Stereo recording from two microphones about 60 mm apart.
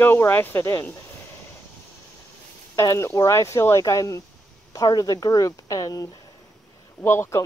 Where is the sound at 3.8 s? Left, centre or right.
Left.